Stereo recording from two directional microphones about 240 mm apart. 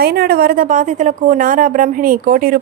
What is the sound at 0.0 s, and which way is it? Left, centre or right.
A woman's voice, right.